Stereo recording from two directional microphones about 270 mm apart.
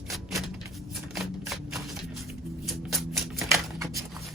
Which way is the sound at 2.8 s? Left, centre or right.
Centre.